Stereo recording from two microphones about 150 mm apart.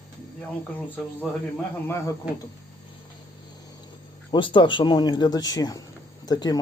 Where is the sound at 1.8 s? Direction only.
15° left (ahead or behind).